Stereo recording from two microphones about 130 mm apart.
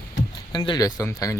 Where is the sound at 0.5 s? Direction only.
35° left (ahead or behind).